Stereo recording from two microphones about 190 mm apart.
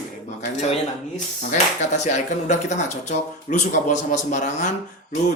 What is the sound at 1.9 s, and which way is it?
Speech, 40° left (ahead or behind).